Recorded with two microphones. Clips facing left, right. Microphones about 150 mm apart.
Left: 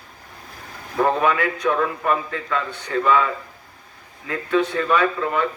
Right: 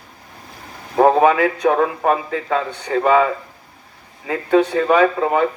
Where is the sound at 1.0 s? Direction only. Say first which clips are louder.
Right 7 dB; 50° right (ahead or behind).